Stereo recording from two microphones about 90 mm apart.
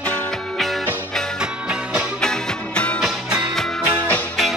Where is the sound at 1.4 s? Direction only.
10° right (ahead or behind).